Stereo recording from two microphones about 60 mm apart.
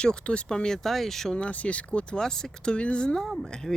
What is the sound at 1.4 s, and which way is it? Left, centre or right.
Speech, left.